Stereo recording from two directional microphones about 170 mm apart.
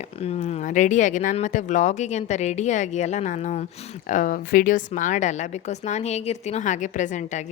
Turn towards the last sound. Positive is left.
turn(degrees=45)  # may be behind; listen again after turning